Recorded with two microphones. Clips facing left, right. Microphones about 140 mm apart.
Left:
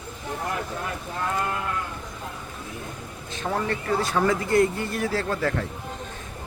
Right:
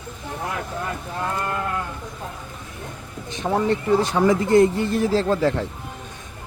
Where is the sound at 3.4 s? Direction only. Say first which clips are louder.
Right 6 dB; 20° right (ahead or behind).